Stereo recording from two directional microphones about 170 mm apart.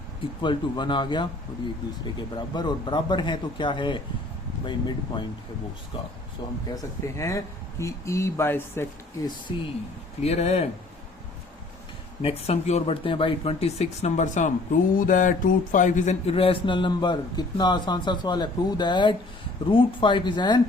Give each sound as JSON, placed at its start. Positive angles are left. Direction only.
{"t": 0.4, "sound": "speech", "side_deg": 25}
{"t": 6.4, "sound": "speech", "side_deg": 20}
{"t": 9.5, "sound": "speech", "side_deg": 30}
{"t": 12.2, "sound": "speech", "side_deg": 35}